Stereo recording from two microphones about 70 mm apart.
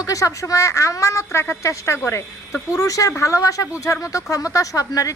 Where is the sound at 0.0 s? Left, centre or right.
Left.